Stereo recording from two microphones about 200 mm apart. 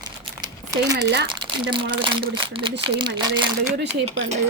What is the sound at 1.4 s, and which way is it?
Crumpling, 25° right (ahead or behind).